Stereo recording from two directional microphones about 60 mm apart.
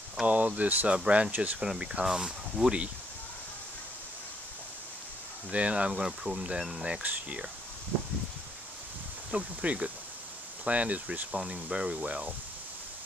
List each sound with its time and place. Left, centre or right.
0.3 s speech: right
0.9 s speech: centre
1.6 s speech: centre
5.5 s speech: right
7.0 s speech: right
9.3 s speech: right